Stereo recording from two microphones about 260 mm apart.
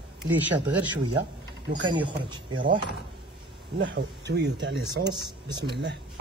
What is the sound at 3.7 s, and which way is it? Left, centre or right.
Speech, right.